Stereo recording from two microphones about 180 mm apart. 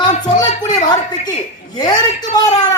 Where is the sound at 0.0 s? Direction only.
20° left (ahead or behind).